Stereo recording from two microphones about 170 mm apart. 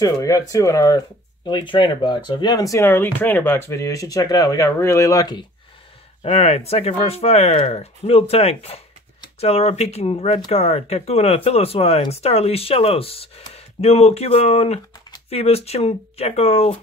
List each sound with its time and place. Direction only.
0.0 s speech: 20° left (ahead or behind)
6.2 s speech: 35° left (ahead or behind)